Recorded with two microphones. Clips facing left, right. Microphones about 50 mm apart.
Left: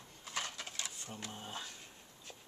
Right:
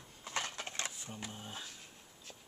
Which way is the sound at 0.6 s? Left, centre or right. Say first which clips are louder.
Right 4 dB; right.